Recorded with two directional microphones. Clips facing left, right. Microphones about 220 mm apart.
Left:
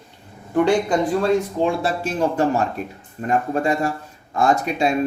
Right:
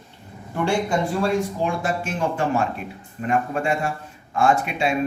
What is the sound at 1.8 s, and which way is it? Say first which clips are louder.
Speech: left 3 dB; 35° left (ahead or behind).